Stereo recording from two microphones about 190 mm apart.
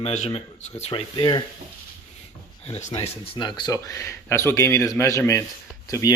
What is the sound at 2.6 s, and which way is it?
Speech, 30° left (ahead or behind).